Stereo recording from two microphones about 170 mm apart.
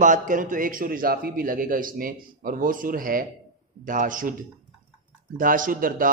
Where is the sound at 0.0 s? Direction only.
50° right (ahead or behind).